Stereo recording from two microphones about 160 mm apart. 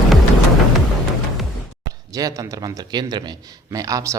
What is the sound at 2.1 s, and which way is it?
A man's voice, 20° right (ahead or behind).